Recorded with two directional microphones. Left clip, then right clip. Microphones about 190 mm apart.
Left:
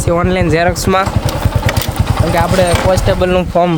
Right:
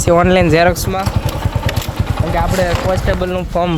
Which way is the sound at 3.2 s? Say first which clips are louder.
Left 7 dB; 45° left (ahead or behind).